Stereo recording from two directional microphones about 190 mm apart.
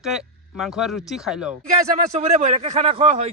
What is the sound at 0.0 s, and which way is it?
Speech, centre (ahead or behind).